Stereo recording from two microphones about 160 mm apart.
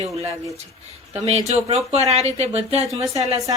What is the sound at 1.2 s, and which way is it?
Speech, 40° right (ahead or behind).